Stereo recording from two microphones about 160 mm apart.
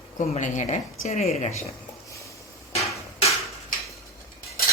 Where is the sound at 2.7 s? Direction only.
40° left (ahead or behind).